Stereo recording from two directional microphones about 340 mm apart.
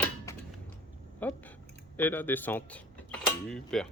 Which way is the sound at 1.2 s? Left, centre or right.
Centre.